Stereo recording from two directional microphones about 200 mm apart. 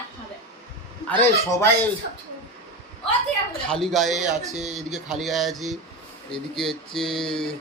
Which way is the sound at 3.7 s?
Centre (ahead or behind).